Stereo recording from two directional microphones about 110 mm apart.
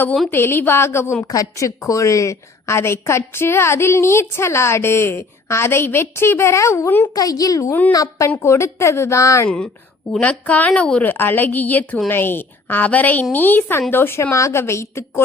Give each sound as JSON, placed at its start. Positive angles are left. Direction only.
{"t": 0.3, "sound": "a woman's voice", "side_deg": 20}
{"t": 7.1, "sound": "a woman's voice", "side_deg": 35}
{"t": 10.1, "sound": "a woman's voice", "side_deg": 10}